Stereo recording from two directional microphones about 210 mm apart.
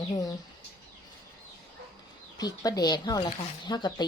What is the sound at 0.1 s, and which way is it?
Speech, 15° left (ahead or behind).